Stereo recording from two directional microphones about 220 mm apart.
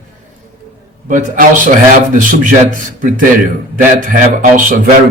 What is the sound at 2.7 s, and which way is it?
Speech, 40° right (ahead or behind).